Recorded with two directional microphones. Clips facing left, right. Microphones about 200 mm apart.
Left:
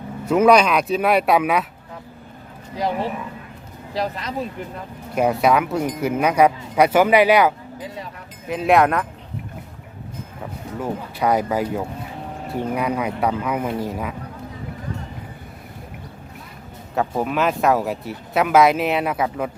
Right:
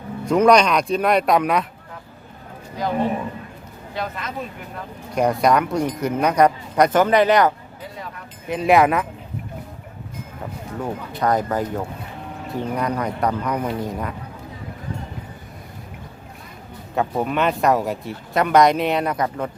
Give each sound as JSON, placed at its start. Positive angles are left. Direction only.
{"t": 0.3, "sound": "speech", "side_deg": 5}
{"t": 3.9, "sound": "speech", "side_deg": 35}
{"t": 5.1, "sound": "speech", "side_deg": 5}
{"t": 10.8, "sound": "speech", "side_deg": 10}
{"t": 16.9, "sound": "speech", "side_deg": 0}